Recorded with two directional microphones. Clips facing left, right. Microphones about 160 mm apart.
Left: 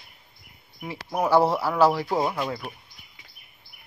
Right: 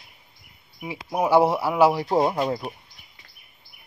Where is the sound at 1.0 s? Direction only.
10° right (ahead or behind); by 2.7 s 30° right (ahead or behind).